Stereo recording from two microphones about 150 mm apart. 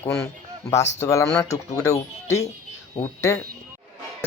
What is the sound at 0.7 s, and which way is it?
Speech, 20° left (ahead or behind).